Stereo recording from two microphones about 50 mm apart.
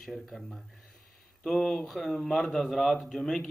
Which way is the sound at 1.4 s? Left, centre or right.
Centre.